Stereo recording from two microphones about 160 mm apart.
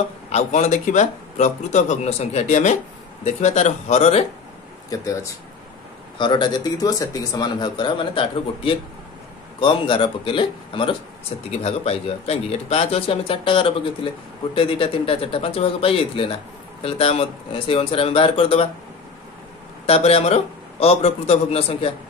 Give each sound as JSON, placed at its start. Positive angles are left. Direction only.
{"t": 0.3, "sound": "speech", "side_deg": 45}
{"t": 4.8, "sound": "speech", "side_deg": 20}
{"t": 19.9, "sound": "speech", "side_deg": 40}